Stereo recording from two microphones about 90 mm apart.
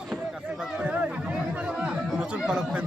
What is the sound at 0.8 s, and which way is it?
Chatter, 15° right (ahead or behind).